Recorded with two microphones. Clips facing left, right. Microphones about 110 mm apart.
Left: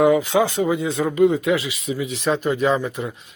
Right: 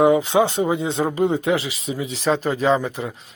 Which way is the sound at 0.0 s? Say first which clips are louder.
Right 1 dB; 25° right (ahead or behind).